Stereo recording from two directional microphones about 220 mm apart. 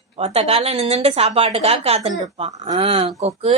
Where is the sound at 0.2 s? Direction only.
25° right (ahead or behind).